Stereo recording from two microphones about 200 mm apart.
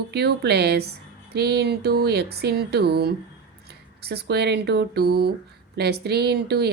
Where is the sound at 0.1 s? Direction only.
55° right (ahead or behind).